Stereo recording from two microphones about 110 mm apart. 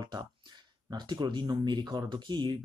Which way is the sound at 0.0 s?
35° right (ahead or behind).